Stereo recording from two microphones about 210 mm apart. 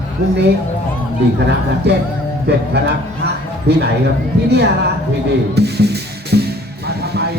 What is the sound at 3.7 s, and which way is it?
Speech, 50° right (ahead or behind).